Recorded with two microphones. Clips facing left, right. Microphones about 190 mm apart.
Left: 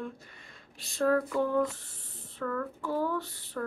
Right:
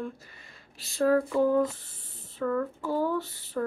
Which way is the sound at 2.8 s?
30° right (ahead or behind).